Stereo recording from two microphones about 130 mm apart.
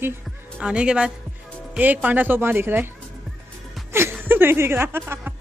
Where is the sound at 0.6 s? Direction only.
5° right (ahead or behind).